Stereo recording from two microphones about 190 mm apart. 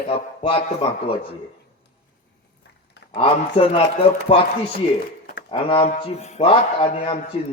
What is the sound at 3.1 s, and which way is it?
A man's voice, 30° left (ahead or behind).